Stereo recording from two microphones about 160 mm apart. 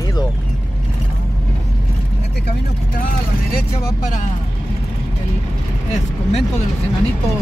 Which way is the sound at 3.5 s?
70° left (ahead or behind).